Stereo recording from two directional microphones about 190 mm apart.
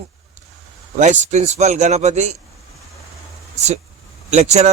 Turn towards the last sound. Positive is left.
turn(degrees=-35)  # may be behind; listen again after turning